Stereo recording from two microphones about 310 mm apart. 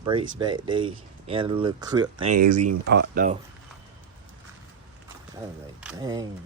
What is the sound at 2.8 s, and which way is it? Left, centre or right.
Speech, right.